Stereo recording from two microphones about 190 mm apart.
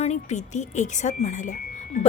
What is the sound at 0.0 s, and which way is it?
A woman's voice, 35° left (ahead or behind).